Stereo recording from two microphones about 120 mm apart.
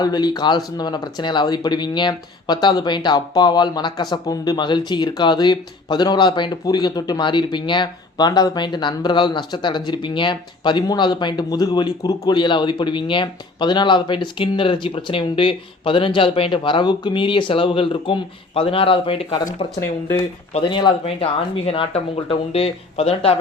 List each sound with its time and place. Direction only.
0.0 s speech: 35° left (ahead or behind); by 19.4 s 50° left (ahead or behind)
19.8 s speech: 20° left (ahead or behind)
20.7 s speech: 40° left (ahead or behind); by 23.4 s 55° left (ahead or behind)